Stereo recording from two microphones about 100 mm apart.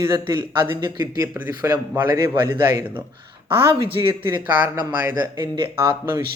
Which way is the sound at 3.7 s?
55° right (ahead or behind).